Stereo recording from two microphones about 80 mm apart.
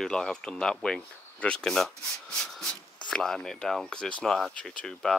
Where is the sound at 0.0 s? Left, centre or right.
Centre.